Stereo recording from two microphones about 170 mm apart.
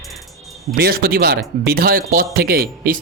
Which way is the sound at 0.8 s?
65° right (ahead or behind).